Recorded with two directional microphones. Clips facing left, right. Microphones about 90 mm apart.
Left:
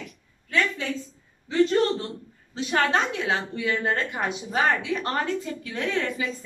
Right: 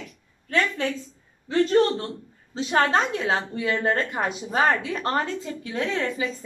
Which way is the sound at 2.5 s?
30° right (ahead or behind).